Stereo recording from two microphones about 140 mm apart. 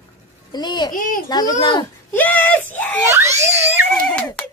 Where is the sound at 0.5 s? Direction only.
30° left (ahead or behind).